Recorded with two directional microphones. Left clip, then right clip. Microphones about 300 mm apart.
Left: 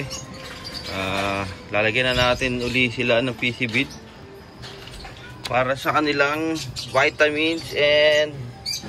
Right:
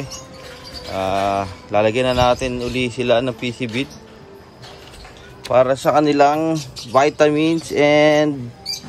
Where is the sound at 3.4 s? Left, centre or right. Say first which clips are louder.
Left 2 dB; right.